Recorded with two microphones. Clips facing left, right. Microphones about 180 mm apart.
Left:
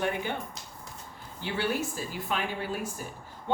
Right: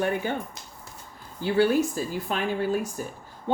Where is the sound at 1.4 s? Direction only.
45° right (ahead or behind).